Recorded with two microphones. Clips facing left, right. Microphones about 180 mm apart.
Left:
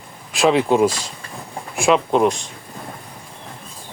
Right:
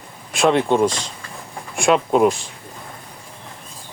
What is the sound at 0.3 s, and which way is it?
Speech, centre (ahead or behind).